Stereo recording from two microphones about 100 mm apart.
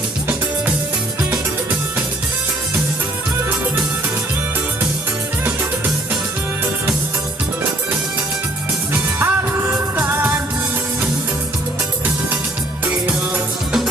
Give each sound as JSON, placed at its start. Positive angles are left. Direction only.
{"t": 8.9, "sound": "music", "side_deg": -20}
{"t": 12.8, "sound": "music", "side_deg": -20}